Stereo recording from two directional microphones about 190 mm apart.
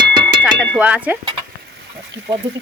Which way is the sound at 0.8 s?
5° right (ahead or behind).